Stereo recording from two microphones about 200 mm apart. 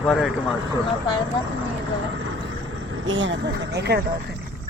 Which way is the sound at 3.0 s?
65° right (ahead or behind).